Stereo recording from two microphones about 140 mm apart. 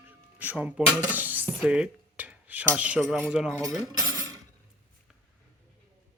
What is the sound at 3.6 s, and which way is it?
Cutlery, 25° right (ahead or behind).